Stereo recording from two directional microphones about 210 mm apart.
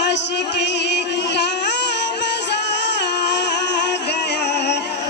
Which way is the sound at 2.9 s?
55° left (ahead or behind).